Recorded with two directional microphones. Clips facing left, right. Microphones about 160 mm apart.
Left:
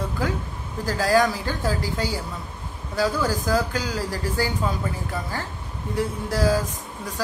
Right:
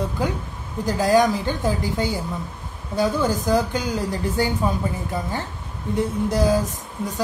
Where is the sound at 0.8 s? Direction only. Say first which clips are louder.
Right 3 dB; 20° right (ahead or behind).